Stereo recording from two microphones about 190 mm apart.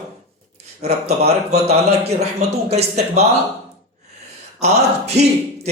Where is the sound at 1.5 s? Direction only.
35° right (ahead or behind).